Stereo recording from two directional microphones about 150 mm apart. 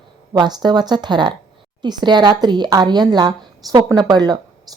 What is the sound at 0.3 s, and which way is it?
Speech, 30° right (ahead or behind).